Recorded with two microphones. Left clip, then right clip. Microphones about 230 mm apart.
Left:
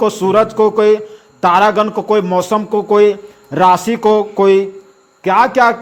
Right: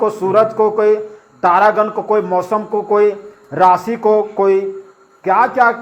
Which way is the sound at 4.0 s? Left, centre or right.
Left.